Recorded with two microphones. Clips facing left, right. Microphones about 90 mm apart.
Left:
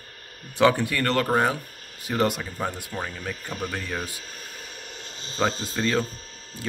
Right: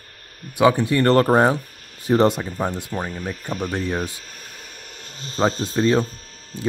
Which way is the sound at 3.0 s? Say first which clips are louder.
Right 4 dB; 5° right (ahead or behind).